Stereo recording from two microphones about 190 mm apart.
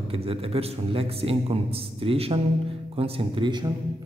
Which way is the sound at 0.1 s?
30° right (ahead or behind).